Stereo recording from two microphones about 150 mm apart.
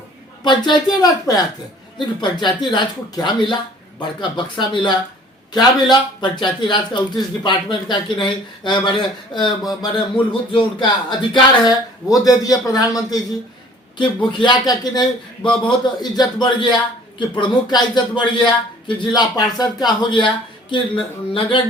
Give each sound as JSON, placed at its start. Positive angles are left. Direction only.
{"t": 0.4, "sound": "a man's voice", "side_deg": 30}